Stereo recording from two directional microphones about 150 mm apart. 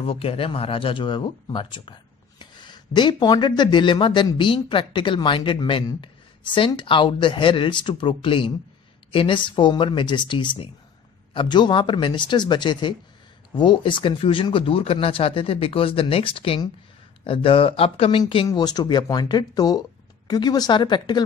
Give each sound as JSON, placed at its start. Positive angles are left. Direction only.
{"t": 0.0, "sound": "speech", "side_deg": 40}